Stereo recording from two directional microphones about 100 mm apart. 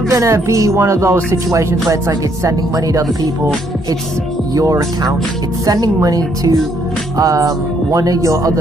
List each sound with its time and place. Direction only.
0.1 s music: 30° right (ahead or behind)
4.6 s music: 35° right (ahead or behind)